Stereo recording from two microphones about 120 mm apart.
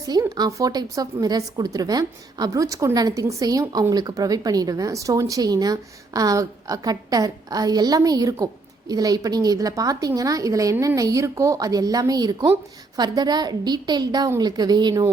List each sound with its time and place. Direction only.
0.0 s a woman's voice: 30° right (ahead or behind)